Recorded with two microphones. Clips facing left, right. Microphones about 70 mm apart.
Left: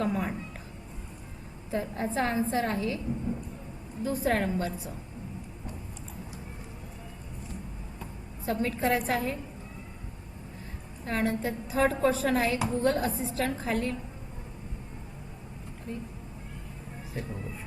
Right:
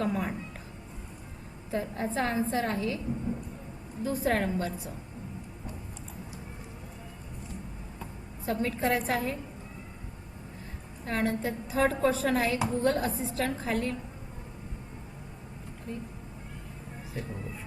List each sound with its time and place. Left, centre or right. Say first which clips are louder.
0.0 s a woman's voice: left 1 dB; centre
1.7 s a woman's voice: left 1 dB; centre
4.0 s a woman's voice: even; centre
8.4 s a woman's voice: left 1 dB; centre
11.0 s a woman's voice: left 1 dB; centre